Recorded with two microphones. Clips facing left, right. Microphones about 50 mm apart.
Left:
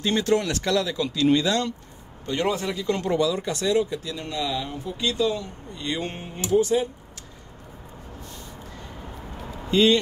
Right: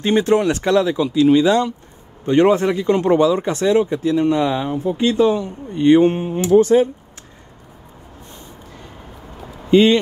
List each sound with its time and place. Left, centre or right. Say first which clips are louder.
0.0 s speech: right 7 dB; right
1.0 s speech: right 7 dB; centre
2.2 s speech: right 11 dB; right
6.5 s speech: right 8 dB; right
9.7 s speech: right 7 dB; right